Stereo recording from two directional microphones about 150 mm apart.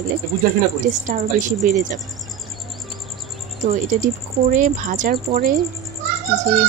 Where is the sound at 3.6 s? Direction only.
55° right (ahead or behind).